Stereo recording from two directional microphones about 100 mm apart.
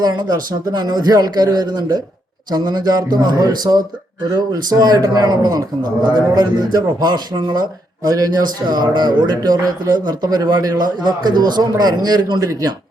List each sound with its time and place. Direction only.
0.0 s a man's voice: 40° right (ahead or behind)